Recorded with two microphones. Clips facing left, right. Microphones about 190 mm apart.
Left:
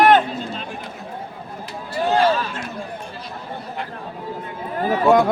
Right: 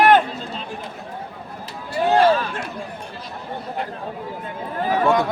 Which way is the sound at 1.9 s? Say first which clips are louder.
Right 2 dB; 55° right (ahead or behind).